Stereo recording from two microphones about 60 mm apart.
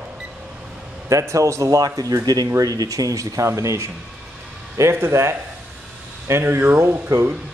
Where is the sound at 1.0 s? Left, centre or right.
Right.